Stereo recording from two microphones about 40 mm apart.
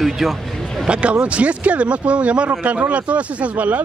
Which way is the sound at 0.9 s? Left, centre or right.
Right.